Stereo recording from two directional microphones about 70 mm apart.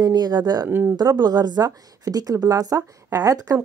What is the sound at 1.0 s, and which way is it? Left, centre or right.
A woman's voice, right.